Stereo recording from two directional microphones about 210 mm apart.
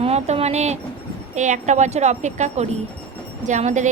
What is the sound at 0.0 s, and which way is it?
A woman's voice, 30° right (ahead or behind).